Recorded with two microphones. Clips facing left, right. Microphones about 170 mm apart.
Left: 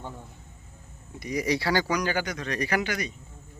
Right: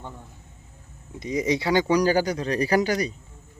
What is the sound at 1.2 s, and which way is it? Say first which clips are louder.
Speech: right 3 dB; 20° right (ahead or behind).